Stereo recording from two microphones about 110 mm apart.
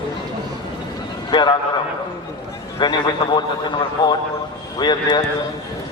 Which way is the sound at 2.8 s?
40° left (ahead or behind).